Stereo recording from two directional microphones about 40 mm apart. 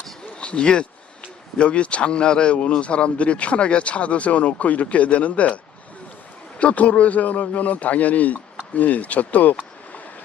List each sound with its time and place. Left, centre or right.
0.3 s speech: left
6.6 s speech: left